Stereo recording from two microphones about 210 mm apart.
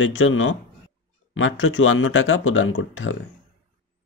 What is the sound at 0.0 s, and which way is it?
Speech, 65° left (ahead or behind).